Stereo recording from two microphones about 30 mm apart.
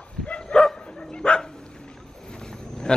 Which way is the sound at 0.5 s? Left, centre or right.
Left.